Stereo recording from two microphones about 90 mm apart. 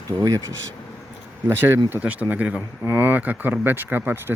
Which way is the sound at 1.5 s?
25° right (ahead or behind).